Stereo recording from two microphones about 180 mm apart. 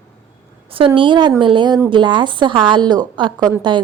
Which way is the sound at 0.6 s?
30° right (ahead or behind).